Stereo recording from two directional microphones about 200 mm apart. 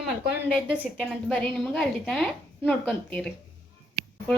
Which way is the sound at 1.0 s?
5° left (ahead or behind).